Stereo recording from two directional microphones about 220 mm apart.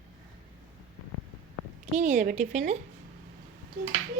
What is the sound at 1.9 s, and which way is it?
Speech, 35° right (ahead or behind).